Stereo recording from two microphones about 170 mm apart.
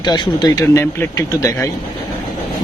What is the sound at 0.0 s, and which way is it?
Speech, 20° left (ahead or behind).